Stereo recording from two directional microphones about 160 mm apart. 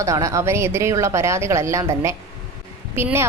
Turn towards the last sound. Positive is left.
turn(degrees=-15)  # may be behind; listen again after turning